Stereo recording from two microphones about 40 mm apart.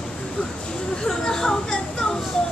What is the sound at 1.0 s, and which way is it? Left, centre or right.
Speech, centre.